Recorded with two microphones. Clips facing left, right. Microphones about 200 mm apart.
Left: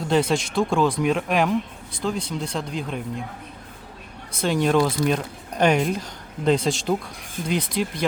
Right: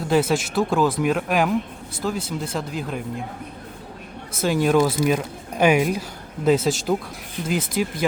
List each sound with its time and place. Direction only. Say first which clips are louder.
0.0 s speech: right 1 dB; 5° right (ahead or behind)
4.3 s speech: right 1 dB; 5° right (ahead or behind)